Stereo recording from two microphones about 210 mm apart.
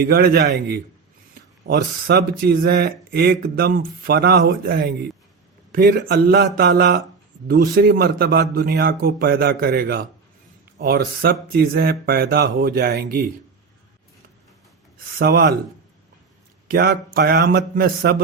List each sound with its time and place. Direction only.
0.0 s speech: 45° right (ahead or behind)
14.9 s speech: 45° right (ahead or behind)
16.6 s speech: 50° right (ahead or behind)